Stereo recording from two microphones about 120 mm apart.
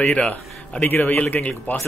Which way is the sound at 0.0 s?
10° left (ahead or behind).